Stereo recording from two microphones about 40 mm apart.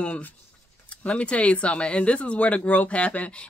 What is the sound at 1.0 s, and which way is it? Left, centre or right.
Speech, left.